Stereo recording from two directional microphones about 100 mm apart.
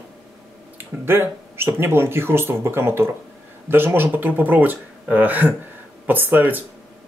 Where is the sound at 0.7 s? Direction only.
25° right (ahead or behind).